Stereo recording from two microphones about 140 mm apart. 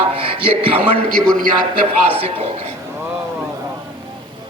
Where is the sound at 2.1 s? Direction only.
40° right (ahead or behind).